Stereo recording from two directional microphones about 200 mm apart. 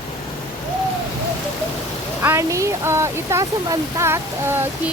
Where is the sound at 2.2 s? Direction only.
15° right (ahead or behind).